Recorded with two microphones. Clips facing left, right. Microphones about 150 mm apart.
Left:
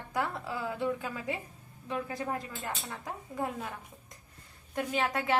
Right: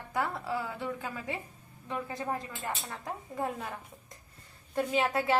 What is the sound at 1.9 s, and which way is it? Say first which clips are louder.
Speech: even; 25° right (ahead or behind).